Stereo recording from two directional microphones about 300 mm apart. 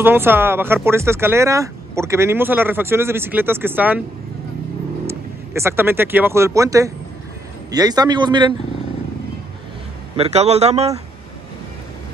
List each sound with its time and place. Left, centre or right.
0.0 s speech: centre
5.0 s speech: centre
10.1 s speech: right